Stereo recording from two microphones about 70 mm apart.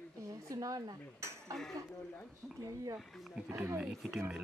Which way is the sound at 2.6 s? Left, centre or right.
Right.